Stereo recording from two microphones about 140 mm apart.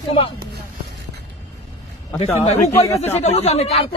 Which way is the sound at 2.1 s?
50° left (ahead or behind).